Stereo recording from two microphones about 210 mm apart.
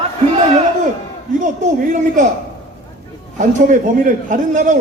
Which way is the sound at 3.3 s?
35° right (ahead or behind).